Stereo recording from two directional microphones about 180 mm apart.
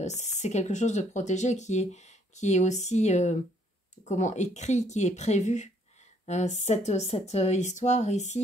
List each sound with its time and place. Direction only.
0.0 s speech: 40° left (ahead or behind)